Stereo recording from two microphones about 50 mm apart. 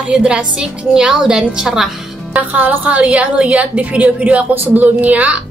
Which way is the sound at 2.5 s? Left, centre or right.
Right.